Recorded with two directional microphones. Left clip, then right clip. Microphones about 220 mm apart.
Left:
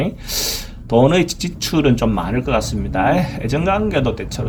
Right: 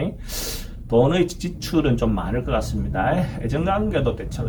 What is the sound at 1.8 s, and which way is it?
Speech, 60° left (ahead or behind).